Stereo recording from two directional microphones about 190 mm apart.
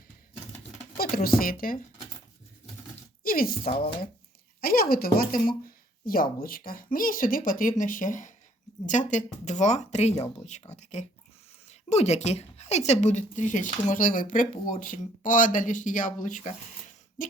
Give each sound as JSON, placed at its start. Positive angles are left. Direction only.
{"t": 0.9, "sound": "a woman's voice", "side_deg": 50}
{"t": 3.2, "sound": "speech", "side_deg": 50}
{"t": 4.6, "sound": "a woman's voice", "side_deg": 50}